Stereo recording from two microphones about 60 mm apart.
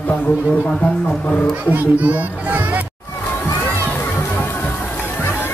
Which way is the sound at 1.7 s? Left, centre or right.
Right.